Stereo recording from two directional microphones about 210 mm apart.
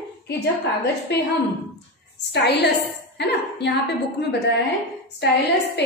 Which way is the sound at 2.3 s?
50° left (ahead or behind).